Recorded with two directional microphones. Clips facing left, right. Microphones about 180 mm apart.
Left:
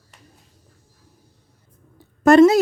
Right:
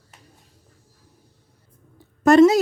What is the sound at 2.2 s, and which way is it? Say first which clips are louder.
Speech: left 1 dB; 60° left (ahead or behind).